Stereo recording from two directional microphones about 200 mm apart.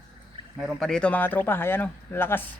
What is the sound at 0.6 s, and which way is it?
Speech, centre (ahead or behind).